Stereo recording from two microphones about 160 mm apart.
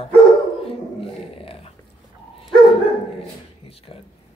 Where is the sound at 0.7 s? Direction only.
35° left (ahead or behind).